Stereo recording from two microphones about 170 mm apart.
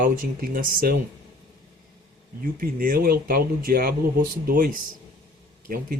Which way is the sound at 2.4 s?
55° right (ahead or behind).